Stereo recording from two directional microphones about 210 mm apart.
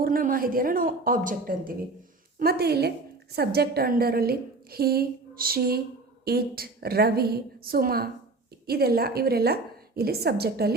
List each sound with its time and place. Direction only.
0.0 s a woman's voice: 40° right (ahead or behind)